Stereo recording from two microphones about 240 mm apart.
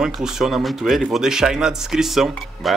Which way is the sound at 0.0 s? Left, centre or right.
Centre.